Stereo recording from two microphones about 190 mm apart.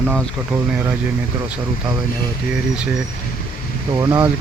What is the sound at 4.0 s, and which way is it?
Speech, 15° right (ahead or behind).